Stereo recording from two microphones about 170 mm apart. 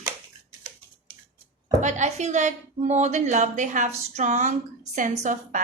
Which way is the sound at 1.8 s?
45° right (ahead or behind).